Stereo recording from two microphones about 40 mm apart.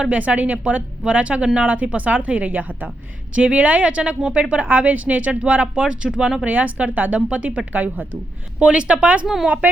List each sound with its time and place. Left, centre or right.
0.0 s a woman's voice: right
5.8 s speech: right
6.4 s a woman's voice: right
9.2 s a woman's voice: centre